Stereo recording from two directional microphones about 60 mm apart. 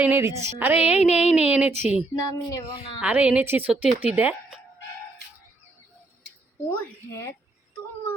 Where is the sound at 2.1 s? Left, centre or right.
Left.